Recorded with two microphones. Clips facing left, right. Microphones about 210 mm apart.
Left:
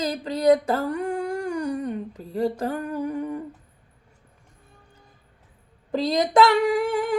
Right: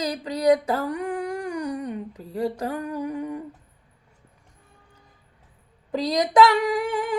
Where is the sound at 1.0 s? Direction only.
25° left (ahead or behind).